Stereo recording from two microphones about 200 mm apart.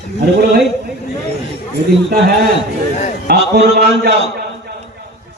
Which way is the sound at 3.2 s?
55° right (ahead or behind).